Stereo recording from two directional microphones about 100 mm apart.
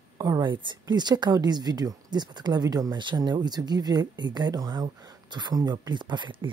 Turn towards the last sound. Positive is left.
turn(degrees=-50)  # may be behind; listen again after turning